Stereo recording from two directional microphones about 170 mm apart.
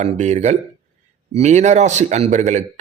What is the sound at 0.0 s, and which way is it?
A man's voice, 40° right (ahead or behind).